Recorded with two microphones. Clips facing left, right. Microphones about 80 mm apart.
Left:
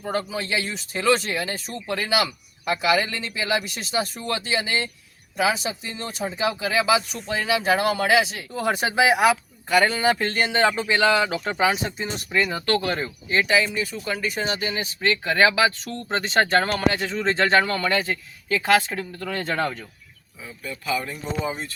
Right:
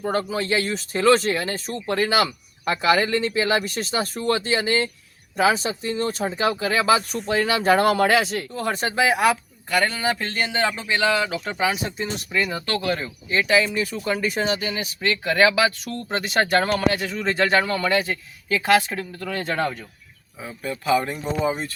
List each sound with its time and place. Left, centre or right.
0.0 s speech: right
8.4 s speech: centre